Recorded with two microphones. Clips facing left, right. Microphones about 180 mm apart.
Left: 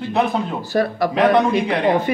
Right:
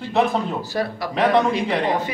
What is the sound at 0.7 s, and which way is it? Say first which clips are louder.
Speech: left 6 dB; 55° left (ahead or behind).